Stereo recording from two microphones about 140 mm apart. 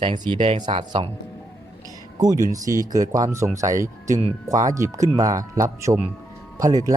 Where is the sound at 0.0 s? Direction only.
35° right (ahead or behind).